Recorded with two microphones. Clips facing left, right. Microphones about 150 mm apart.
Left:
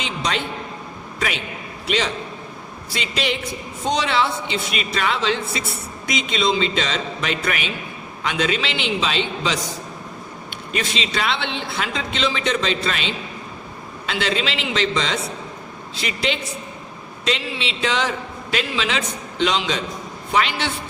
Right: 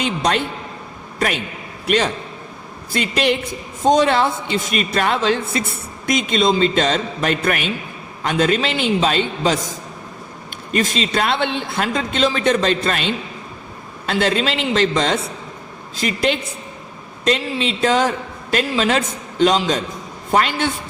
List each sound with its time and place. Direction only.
0.0 s a man's voice: 55° right (ahead or behind)
2.9 s a man's voice: 55° right (ahead or behind)
10.7 s a man's voice: 45° right (ahead or behind)